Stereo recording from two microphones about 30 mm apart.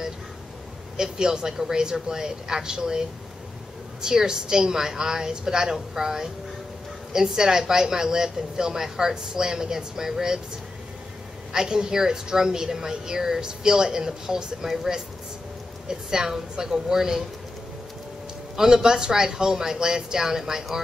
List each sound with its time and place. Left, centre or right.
0.9 s a woman's voice: right
11.5 s a woman's voice: right
15.9 s a woman's voice: centre
18.8 s a woman's voice: right